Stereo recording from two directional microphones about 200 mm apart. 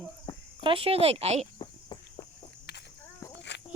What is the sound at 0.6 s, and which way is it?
Speech, 25° right (ahead or behind).